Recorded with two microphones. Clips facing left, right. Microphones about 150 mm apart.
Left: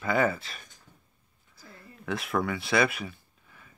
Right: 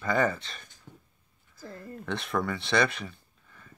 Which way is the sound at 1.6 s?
45° right (ahead or behind).